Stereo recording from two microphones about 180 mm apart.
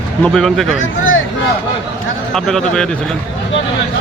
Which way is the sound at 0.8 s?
90° left.